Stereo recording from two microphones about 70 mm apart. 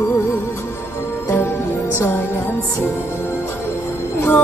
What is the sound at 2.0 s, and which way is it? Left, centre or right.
Music, left.